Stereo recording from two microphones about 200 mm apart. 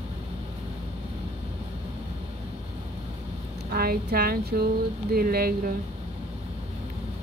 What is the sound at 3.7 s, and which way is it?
A woman's voice, 50° right (ahead or behind).